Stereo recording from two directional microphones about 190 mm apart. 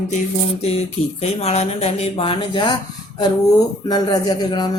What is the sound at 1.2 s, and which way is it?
Speech, 35° left (ahead or behind).